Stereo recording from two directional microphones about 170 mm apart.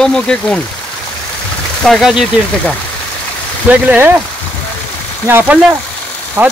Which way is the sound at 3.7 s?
10° right (ahead or behind).